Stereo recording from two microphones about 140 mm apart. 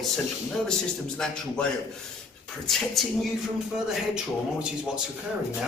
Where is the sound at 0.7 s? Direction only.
5° left (ahead or behind).